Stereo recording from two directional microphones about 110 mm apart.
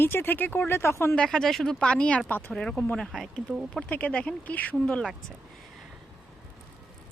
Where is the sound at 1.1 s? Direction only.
5° left (ahead or behind).